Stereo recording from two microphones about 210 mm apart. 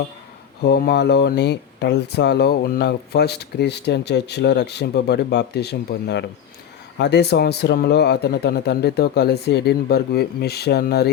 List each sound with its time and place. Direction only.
0.6 s speech: 50° left (ahead or behind)